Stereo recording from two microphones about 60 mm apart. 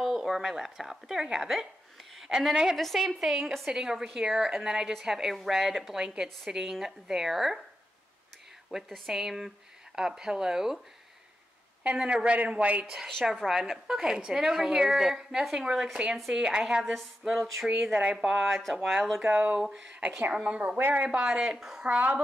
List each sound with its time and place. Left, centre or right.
0.0 s a woman's voice: centre
8.7 s a woman's voice: centre
12.0 s a man's voice: centre
12.8 s a woman's voice: centre
16.9 s a woman's voice: centre
18.4 s a woman's voice: centre
19.2 s a man's voice: right
21.1 s a woman's voice: centre
21.8 s a man's voice: right